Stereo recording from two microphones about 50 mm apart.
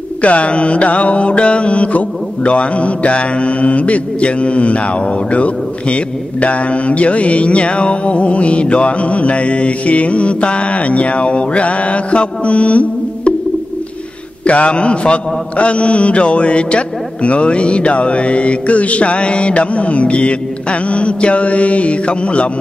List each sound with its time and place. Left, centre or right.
0.2 s speech: left
14.4 s speech: left